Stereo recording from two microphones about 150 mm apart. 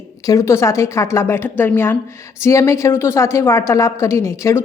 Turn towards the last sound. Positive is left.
turn(degrees=20)  # may be behind; listen again after turning